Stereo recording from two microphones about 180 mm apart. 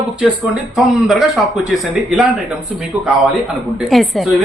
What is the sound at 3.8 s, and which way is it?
Speech, centre (ahead or behind).